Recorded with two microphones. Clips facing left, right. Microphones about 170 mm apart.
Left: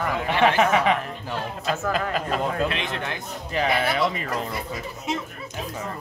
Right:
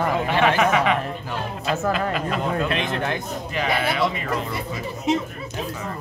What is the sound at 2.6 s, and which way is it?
Speech, 45° right (ahead or behind).